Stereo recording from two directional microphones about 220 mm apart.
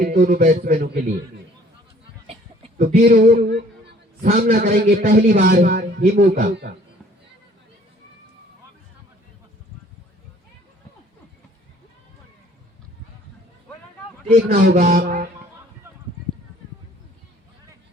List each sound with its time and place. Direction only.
0.0 s a man's voice: 40° right (ahead or behind)
2.2 s a man's voice: 30° right (ahead or behind); by 6.7 s 45° right (ahead or behind)
14.5 s a man's voice: 40° right (ahead or behind)